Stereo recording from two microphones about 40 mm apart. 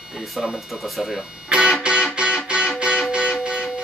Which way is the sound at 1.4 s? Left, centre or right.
Right.